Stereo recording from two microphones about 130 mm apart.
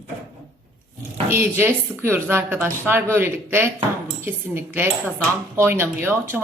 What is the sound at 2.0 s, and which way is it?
A woman's voice, 15° right (ahead or behind).